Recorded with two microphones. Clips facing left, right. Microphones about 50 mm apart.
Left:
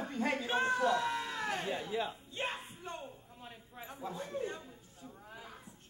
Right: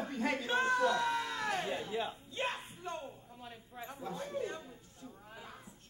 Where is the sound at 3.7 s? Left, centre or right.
Centre.